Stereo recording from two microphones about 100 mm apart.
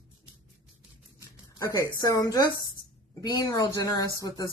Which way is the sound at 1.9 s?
40° left (ahead or behind).